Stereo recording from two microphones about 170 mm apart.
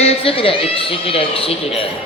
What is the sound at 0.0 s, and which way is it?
A man's voice, 35° left (ahead or behind).